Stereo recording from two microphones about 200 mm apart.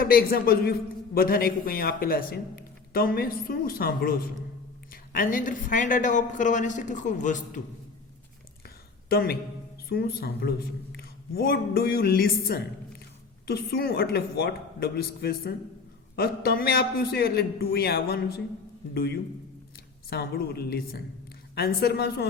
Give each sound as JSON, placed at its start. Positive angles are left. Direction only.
{"t": 0.0, "sound": "a man's voice", "side_deg": 45}
{"t": 5.1, "sound": "speech", "side_deg": 45}
{"t": 9.0, "sound": "a woman's voice", "side_deg": 50}